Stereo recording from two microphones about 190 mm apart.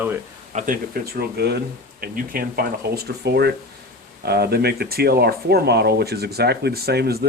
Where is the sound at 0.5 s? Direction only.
45° right (ahead or behind).